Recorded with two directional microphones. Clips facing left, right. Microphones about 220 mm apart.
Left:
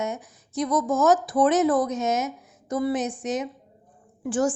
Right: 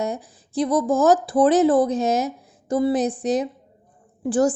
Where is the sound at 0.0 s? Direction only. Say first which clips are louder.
Right 3 dB; 35° right (ahead or behind).